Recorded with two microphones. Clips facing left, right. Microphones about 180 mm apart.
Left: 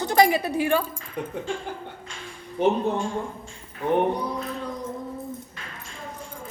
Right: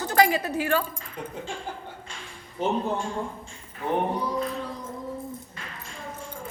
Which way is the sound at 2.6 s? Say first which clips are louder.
Left 6 dB; 65° left (ahead or behind).